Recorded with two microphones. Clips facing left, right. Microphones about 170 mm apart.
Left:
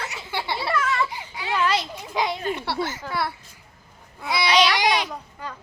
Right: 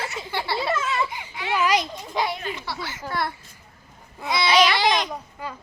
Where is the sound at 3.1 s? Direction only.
5° left (ahead or behind).